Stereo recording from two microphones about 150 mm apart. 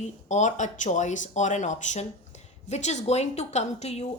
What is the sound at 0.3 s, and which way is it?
A woman's voice, 50° left (ahead or behind).